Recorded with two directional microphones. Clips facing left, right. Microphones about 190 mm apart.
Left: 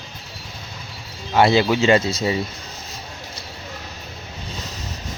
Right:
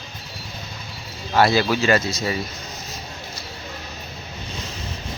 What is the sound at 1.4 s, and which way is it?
Speech, 20° left (ahead or behind).